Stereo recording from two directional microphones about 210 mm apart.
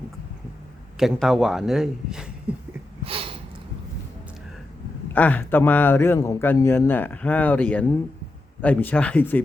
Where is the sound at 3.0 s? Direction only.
25° right (ahead or behind).